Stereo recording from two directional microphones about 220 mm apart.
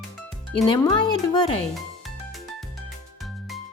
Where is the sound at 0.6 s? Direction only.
20° left (ahead or behind).